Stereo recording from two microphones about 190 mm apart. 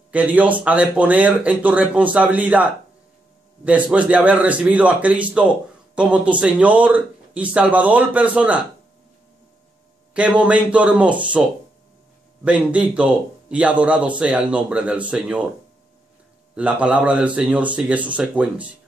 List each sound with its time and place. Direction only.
0.1 s a man's voice: 5° right (ahead or behind)
10.1 s a man's voice: 5° right (ahead or behind)
12.4 s a man's voice: 5° right (ahead or behind)
16.5 s a man's voice: 5° right (ahead or behind)